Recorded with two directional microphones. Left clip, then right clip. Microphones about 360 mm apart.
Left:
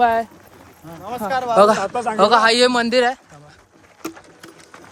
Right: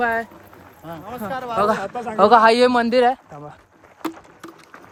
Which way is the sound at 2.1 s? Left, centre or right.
Centre.